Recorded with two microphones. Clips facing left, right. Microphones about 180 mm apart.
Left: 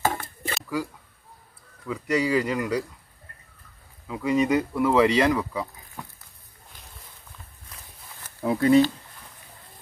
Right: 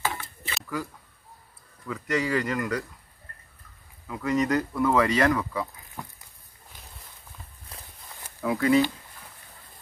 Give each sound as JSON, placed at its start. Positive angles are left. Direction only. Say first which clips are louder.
{"t": 0.0, "sound": "a sound", "louder": "left 5 dB", "side_deg": 45}
{"t": 1.9, "sound": "speech", "louder": "left 3 dB", "side_deg": 15}
{"t": 4.1, "sound": "speech", "louder": "left 3 dB", "side_deg": 10}
{"t": 7.7, "sound": "walk", "louder": "right 3 dB", "side_deg": -30}
{"t": 8.4, "sound": "speech", "louder": "left 3 dB", "side_deg": 30}